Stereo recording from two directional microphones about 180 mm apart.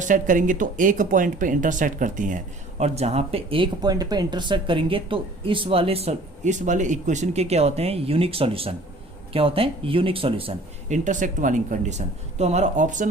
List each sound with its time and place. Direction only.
0.0 s speech: 45° right (ahead or behind)